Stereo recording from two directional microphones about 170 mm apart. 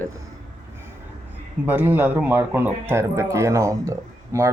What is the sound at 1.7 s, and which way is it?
Speech, 10° right (ahead or behind).